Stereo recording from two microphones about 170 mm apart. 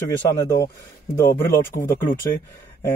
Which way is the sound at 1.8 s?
15° left (ahead or behind).